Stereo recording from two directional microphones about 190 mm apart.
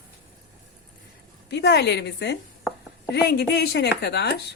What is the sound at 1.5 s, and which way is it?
Speech, 60° left (ahead or behind).